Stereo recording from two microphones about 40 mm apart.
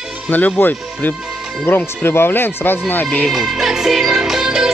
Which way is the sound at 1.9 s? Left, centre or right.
Left.